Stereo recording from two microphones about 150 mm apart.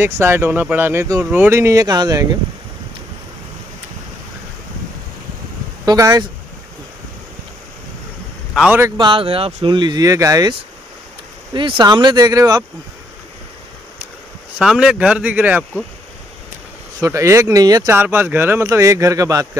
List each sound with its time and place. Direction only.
0.0 s speech: 15° right (ahead or behind)
5.9 s speech: 20° right (ahead or behind)
8.5 s speech: 15° right (ahead or behind)
8.9 s speech: 35° right (ahead or behind)
11.5 s speech: 35° right (ahead or behind)
14.6 s speech: 5° right (ahead or behind)
17.0 s speech: 20° right (ahead or behind)